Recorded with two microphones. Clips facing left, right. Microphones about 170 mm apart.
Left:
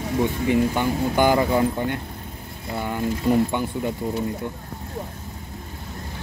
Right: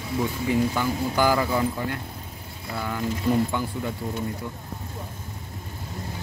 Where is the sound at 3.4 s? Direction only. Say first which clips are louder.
Left 3 dB; 20° left (ahead or behind).